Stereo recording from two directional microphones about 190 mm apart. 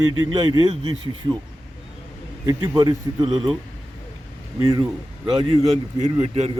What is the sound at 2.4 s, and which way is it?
A man's voice, 20° right (ahead or behind).